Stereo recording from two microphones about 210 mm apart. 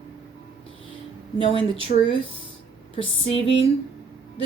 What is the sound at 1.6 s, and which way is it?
Speech, 25° left (ahead or behind).